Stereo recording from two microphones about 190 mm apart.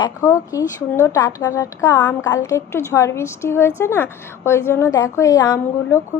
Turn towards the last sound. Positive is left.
turn(degrees=15)  # may be behind; listen again after turning